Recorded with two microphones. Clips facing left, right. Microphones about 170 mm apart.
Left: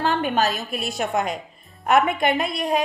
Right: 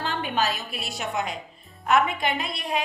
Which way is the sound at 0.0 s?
50° left (ahead or behind).